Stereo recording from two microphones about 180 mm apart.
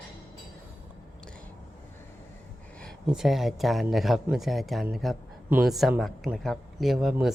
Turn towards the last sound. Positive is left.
turn(degrees=0)  # may be behind; listen again after turning